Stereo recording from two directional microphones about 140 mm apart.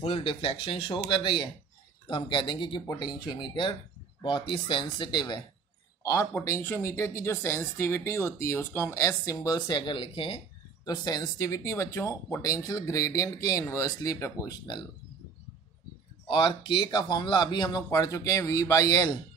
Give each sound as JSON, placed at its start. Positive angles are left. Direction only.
{"t": 0.0, "sound": "speech", "side_deg": 40}
{"t": 6.0, "sound": "a woman's voice", "side_deg": 20}
{"t": 16.3, "sound": "a woman's voice", "side_deg": 35}